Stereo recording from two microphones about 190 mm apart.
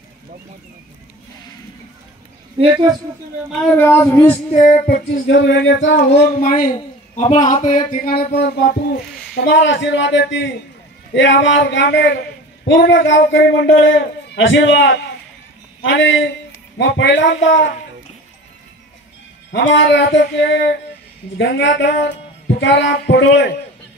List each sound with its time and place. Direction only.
2.6 s speech: 20° right (ahead or behind)
3.7 s speech: 10° left (ahead or behind)
4.3 s speech: 35° left (ahead or behind)
4.8 s a man's voice: 55° left (ahead or behind); by 5.9 s 75° left (ahead or behind)
6.0 s a man's voice: 60° left (ahead or behind)
19.5 s a man's voice: 70° left (ahead or behind)